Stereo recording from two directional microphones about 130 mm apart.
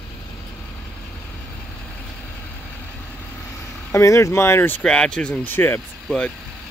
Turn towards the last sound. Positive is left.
turn(degrees=10)  # may be behind; listen again after turning